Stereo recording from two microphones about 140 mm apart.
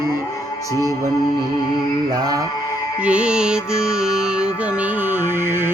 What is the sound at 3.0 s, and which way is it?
Music, 5° right (ahead or behind).